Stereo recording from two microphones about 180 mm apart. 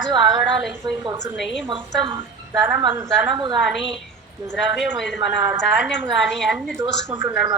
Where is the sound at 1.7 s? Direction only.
25° right (ahead or behind).